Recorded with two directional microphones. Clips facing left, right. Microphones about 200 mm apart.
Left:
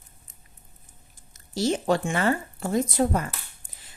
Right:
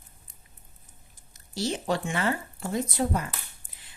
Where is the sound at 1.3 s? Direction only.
45° left (ahead or behind).